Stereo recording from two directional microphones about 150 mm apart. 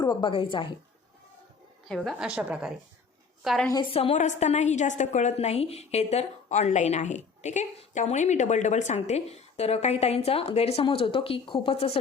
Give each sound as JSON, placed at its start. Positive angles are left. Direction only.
{"t": 0.0, "sound": "a woman's voice", "side_deg": 30}
{"t": 1.9, "sound": "a woman's voice", "side_deg": 0}
{"t": 4.1, "sound": "a woman's voice", "side_deg": 55}